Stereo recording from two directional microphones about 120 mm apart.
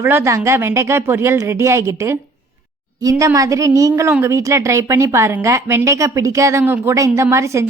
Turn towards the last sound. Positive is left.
turn(degrees=-25)  # may be behind; listen again after turning